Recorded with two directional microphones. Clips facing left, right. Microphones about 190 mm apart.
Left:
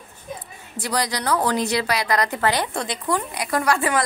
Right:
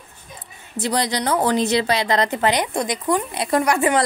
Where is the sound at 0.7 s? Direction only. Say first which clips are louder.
Right 3 dB; 25° right (ahead or behind).